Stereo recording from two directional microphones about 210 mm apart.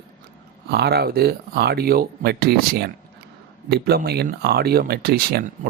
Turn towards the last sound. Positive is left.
turn(degrees=-45)  # may be behind; listen again after turning